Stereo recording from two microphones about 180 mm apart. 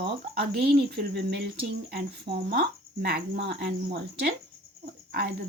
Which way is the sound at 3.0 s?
60° right (ahead or behind).